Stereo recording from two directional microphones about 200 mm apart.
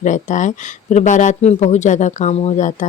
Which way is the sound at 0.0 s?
40° left (ahead or behind).